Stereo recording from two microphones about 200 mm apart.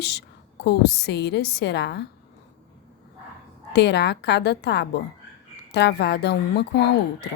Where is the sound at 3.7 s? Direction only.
55° left (ahead or behind).